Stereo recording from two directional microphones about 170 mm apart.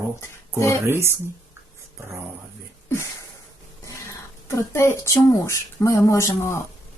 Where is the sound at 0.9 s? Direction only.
15° right (ahead or behind).